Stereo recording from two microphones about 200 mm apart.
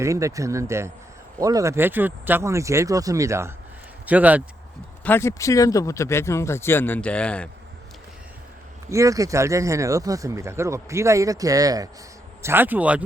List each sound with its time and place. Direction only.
0.0 s speech: 15° right (ahead or behind)
5.0 s speech: 10° left (ahead or behind)
8.9 s speech: 15° right (ahead or behind)